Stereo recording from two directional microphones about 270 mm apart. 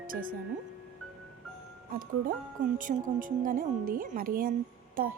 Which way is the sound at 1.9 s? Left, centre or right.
Right.